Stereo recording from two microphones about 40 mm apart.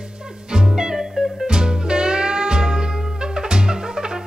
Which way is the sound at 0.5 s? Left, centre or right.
Centre.